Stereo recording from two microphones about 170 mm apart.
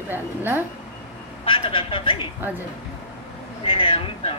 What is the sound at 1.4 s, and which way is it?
Speech, 30° left (ahead or behind).